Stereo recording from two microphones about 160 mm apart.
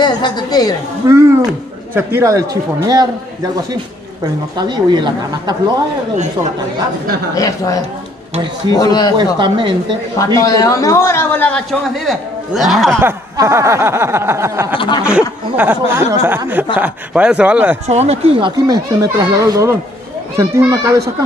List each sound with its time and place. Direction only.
0.0 s a woman's voice: 25° left (ahead or behind)
1.0 s snicker: 15° right (ahead or behind)
2.5 s speech: 20° right (ahead or behind)
4.6 s speech: 30° right (ahead or behind)
7.3 s a woman's voice: 20° left (ahead or behind)
9.1 s speech: 30° right (ahead or behind)
10.1 s a man's voice: 20° left (ahead or behind)
12.1 s a man's voice: centre (ahead or behind)
12.9 s snicker: 15° right (ahead or behind)
14.7 s a sound: 30° left (ahead or behind)
15.0 s snicker: 10° right (ahead or behind)
17.8 s speech: 40° right (ahead or behind)
18.7 s speech: 20° right (ahead or behind)